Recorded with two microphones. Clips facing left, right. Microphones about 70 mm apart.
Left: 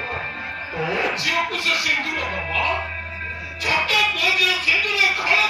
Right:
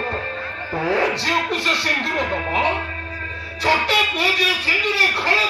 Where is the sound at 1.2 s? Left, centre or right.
Right.